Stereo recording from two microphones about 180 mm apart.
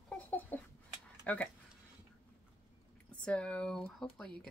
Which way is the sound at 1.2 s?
10° left (ahead or behind).